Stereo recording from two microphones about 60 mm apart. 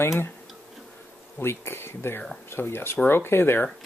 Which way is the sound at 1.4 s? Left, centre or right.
Left.